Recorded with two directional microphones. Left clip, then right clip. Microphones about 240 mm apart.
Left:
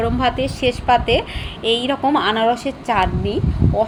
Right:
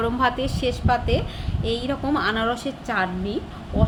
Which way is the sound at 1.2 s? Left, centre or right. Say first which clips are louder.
Left 7 dB; right.